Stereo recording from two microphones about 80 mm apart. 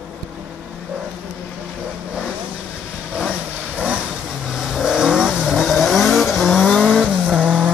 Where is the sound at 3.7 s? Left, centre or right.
Centre.